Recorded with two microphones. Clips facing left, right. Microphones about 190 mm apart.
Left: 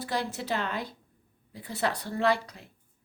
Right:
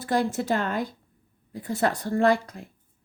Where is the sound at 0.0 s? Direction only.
50° right (ahead or behind).